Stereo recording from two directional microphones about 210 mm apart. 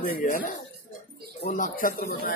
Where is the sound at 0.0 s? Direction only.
40° left (ahead or behind).